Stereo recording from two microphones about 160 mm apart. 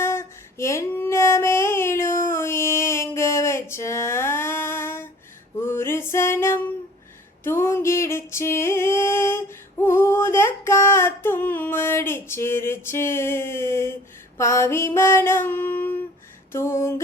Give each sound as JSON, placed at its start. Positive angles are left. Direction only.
{"t": 0.0, "sound": "female singing", "side_deg": 15}
{"t": 5.6, "sound": "music", "side_deg": 15}
{"t": 9.8, "sound": "female singing", "side_deg": 15}
{"t": 14.3, "sound": "a sound", "side_deg": 15}